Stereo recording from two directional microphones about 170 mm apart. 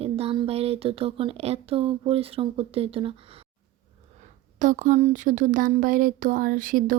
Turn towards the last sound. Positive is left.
turn(degrees=-50)  # may be behind; listen again after turning